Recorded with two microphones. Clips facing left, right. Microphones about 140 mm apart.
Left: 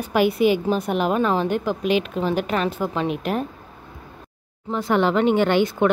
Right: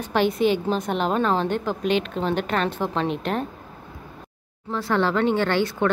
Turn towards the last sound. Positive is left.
turn(degrees=15)  # may be behind; listen again after turning